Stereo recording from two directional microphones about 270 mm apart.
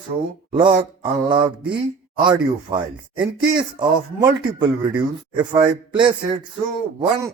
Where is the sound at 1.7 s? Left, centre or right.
Centre.